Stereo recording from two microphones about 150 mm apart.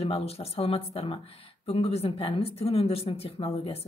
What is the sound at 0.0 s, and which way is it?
Speech, 40° left (ahead or behind).